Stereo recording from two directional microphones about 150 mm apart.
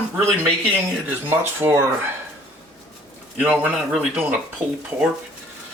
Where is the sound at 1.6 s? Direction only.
15° right (ahead or behind).